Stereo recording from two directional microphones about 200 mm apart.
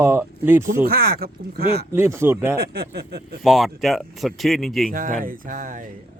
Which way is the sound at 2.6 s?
50° right (ahead or behind).